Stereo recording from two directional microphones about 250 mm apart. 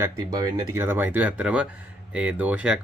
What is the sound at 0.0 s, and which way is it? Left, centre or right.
Speech, centre.